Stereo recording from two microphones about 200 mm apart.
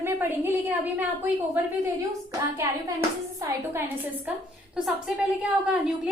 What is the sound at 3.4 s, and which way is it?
A woman's voice, 10° right (ahead or behind).